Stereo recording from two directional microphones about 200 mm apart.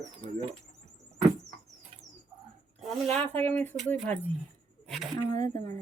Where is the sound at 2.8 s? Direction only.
Centre (ahead or behind).